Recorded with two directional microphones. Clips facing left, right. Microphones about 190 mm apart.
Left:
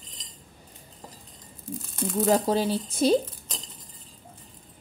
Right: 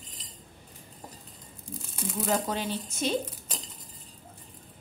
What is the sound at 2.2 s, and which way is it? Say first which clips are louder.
Speech: left 7 dB; 35° left (ahead or behind).